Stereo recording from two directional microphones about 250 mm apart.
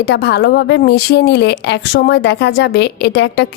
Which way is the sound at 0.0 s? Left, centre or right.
Left.